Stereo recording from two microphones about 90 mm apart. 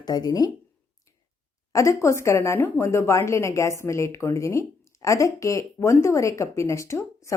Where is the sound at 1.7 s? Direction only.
35° left (ahead or behind).